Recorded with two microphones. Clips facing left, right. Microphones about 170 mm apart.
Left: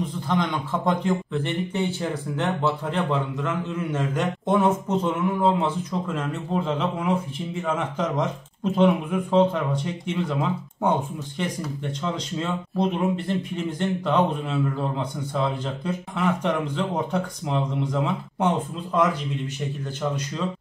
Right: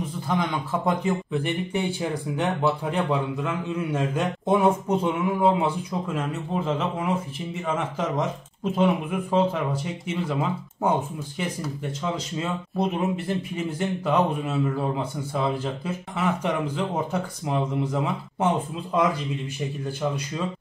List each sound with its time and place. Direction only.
0.3 s speech: 5° right (ahead or behind)
20.0 s speech: 10° right (ahead or behind)